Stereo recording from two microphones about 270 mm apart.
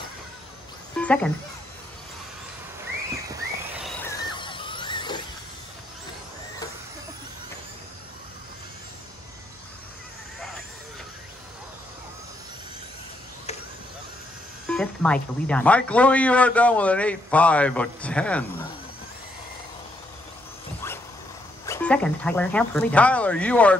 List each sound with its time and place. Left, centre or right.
0.9 s speech: centre
3.3 s squeal: centre
14.7 s music: centre
15.4 s speech: centre
21.6 s speech: centre